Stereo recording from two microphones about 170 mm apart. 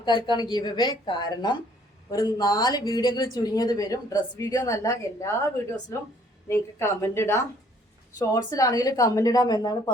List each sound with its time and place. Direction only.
0.0 s speech: 25° left (ahead or behind)
6.5 s a woman's voice: 15° left (ahead or behind)